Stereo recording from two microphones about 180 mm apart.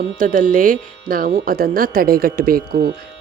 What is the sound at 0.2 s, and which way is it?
Speech, 50° right (ahead or behind).